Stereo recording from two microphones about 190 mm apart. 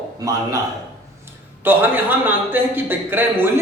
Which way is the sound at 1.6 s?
10° right (ahead or behind).